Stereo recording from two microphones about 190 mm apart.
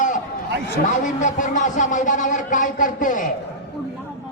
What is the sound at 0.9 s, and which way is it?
A man's voice, 40° left (ahead or behind).